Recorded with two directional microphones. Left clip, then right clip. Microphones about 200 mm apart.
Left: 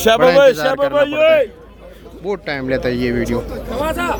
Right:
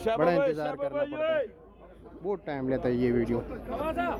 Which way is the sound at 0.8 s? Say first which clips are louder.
Left 16 dB; 45° left (ahead or behind).